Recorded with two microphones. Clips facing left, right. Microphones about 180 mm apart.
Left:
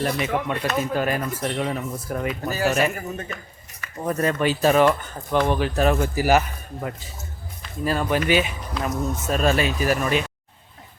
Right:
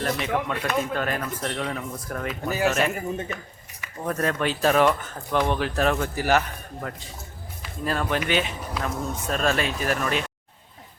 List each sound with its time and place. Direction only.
0.0 s speech: 5° left (ahead or behind)
2.9 s speech: 25° right (ahead or behind)
3.9 s speech: 5° left (ahead or behind)
7.9 s speech: centre (ahead or behind)